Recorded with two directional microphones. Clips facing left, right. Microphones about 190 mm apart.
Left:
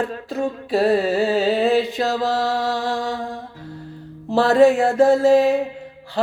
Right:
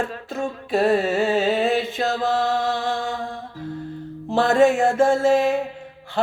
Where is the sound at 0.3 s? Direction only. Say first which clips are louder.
Left 3 dB; 35° left (ahead or behind).